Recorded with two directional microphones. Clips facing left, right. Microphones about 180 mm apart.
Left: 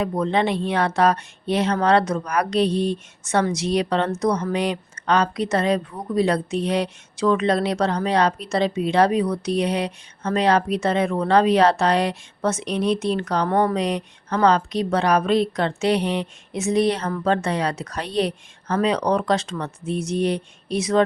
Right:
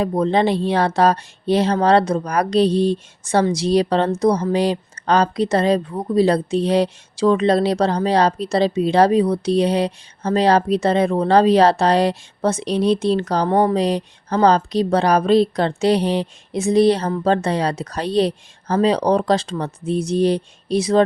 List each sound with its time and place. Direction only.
0.0 s speech: 35° right (ahead or behind)
13.5 s speech: 20° right (ahead or behind)
13.7 s speech: 30° right (ahead or behind)